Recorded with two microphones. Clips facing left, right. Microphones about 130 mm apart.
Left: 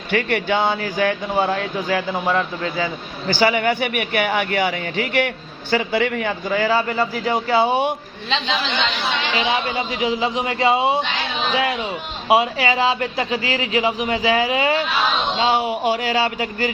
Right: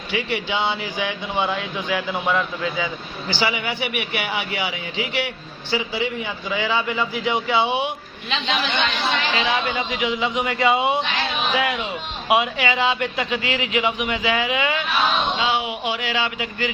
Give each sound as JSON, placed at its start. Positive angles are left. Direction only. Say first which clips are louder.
{"t": 0.1, "sound": "a man's voice", "louder": "left 5 dB", "side_deg": 55}
{"t": 9.4, "sound": "a man's voice", "louder": "left 1 dB", "side_deg": 30}